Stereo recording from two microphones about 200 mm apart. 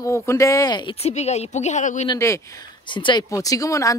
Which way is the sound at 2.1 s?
15° left (ahead or behind).